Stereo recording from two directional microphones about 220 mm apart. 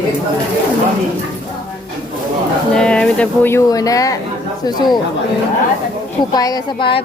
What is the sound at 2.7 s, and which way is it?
Speech, 5° left (ahead or behind).